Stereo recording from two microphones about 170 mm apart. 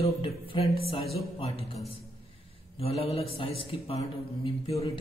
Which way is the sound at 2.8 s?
35° left (ahead or behind).